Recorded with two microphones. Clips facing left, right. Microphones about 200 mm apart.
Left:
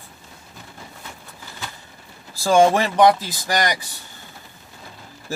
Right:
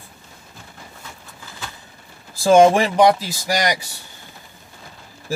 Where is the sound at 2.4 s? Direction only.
15° right (ahead or behind).